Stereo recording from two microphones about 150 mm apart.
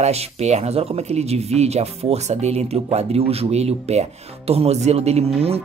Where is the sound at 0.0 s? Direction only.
45° right (ahead or behind).